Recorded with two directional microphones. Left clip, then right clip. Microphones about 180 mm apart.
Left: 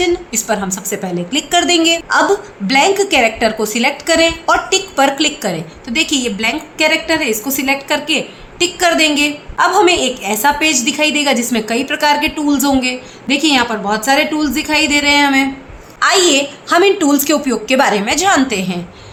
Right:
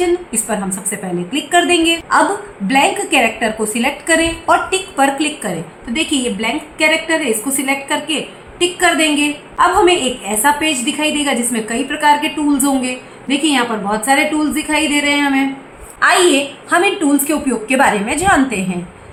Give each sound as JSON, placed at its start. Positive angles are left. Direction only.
{"t": 0.3, "sound": "a woman's voice", "side_deg": 45}